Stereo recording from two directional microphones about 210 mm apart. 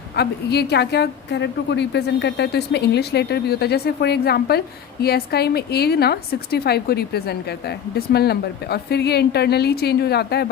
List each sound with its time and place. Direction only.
0.2 s a woman's voice: 50° left (ahead or behind)